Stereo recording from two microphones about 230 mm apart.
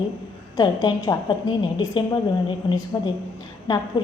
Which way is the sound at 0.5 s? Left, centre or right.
Centre.